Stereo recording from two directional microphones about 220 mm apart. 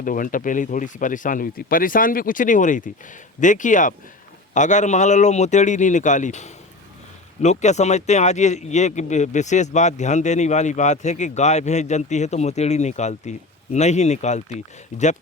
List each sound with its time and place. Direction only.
0.0 s speech: 40° left (ahead or behind)